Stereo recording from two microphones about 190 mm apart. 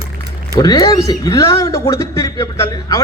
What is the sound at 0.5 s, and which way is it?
A man's voice, 20° left (ahead or behind).